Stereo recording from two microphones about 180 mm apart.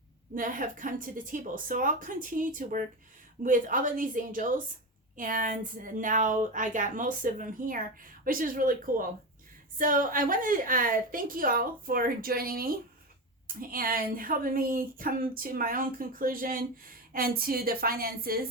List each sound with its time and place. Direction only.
0.3 s a woman's voice: 50° right (ahead or behind)